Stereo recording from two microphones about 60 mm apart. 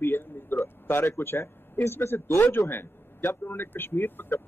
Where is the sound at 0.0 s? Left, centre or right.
Left.